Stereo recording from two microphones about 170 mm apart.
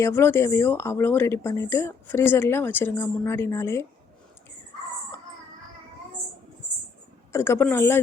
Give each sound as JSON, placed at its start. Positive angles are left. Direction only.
{"t": 0.0, "sound": "speech", "side_deg": 15}
{"t": 7.3, "sound": "speech", "side_deg": 15}